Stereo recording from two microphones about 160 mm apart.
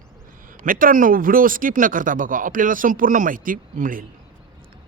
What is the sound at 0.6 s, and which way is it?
A man's voice, 60° right (ahead or behind).